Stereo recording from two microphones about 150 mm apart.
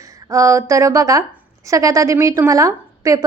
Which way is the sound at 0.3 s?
20° right (ahead or behind).